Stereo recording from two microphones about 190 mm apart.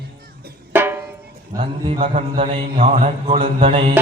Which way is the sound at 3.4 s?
25° right (ahead or behind).